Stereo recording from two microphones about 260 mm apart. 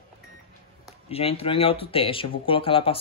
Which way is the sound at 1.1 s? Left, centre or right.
Left.